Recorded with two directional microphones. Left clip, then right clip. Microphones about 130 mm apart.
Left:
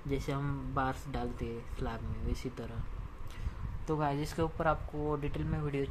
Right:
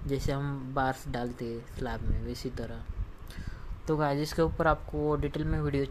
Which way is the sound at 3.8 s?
35° right (ahead or behind).